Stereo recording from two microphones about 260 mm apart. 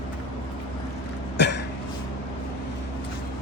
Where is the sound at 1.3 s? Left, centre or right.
Left.